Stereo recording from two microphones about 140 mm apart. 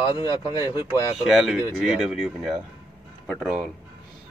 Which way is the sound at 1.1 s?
Centre (ahead or behind).